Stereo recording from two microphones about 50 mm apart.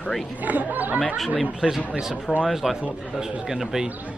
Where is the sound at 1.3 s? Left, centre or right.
Centre.